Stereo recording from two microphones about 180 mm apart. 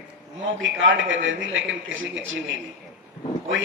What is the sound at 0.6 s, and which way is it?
A man's voice, 90° right.